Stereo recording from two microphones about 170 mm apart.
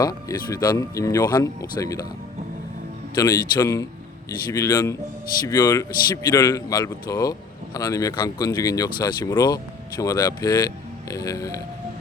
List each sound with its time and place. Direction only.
0.3 s speech: 20° left (ahead or behind)
3.2 s speech: 20° left (ahead or behind)